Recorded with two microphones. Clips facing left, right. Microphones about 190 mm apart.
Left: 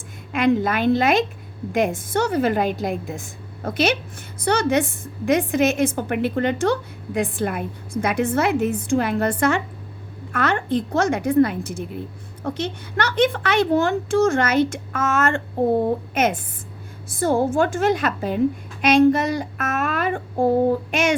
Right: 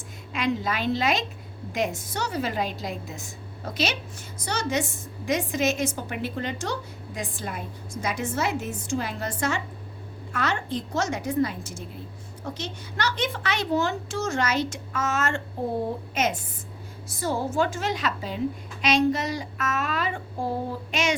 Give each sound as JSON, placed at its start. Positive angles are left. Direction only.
{"t": 0.3, "sound": "a woman's voice", "side_deg": 55}